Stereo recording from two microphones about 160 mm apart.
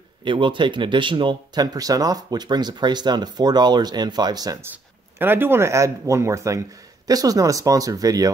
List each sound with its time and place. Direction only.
0.2 s speech: 30° right (ahead or behind)
5.2 s speech: 15° right (ahead or behind)